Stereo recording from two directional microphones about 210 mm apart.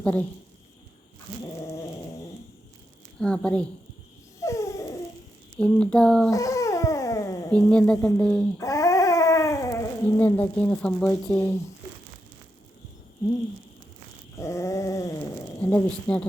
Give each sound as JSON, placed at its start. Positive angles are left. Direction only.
{"t": 0.0, "sound": "speech", "side_deg": 5}
{"t": 3.2, "sound": "a woman's voice", "side_deg": 5}
{"t": 4.4, "sound": "dog", "side_deg": 15}
{"t": 5.5, "sound": "a woman's voice", "side_deg": 5}
{"t": 6.3, "sound": "dog", "side_deg": 15}
{"t": 7.5, "sound": "a woman's voice", "side_deg": 5}
{"t": 8.6, "sound": "dog", "side_deg": 15}
{"t": 14.3, "sound": "a sound", "side_deg": 15}